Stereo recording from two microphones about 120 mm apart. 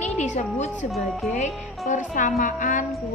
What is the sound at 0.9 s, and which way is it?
Speech, centre (ahead or behind).